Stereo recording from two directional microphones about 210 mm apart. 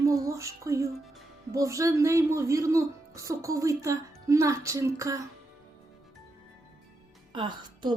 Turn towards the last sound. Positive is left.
turn(degrees=-25)  # may be behind; listen again after turning